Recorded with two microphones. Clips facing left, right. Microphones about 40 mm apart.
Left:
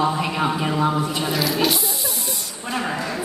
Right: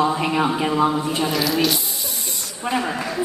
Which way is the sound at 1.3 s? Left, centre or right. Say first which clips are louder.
Left 1 dB; centre.